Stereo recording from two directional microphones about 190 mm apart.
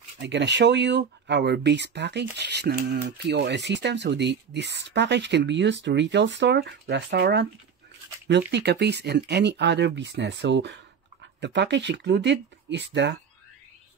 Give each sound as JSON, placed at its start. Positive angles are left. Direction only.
{"t": 0.2, "sound": "speech", "side_deg": -70}